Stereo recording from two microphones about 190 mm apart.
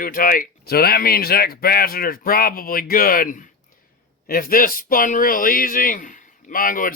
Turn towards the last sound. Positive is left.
turn(degrees=45)  # may be behind; listen again after turning